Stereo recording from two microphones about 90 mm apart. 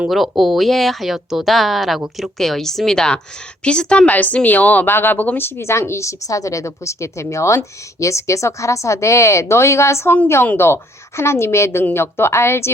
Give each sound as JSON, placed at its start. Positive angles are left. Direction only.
{"t": 0.1, "sound": "a woman's voice", "side_deg": 0}